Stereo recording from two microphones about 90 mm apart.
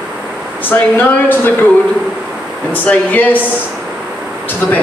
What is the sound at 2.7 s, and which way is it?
Speech, 20° left (ahead or behind).